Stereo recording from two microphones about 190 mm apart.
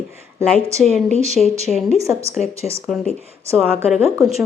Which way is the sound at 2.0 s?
15° right (ahead or behind).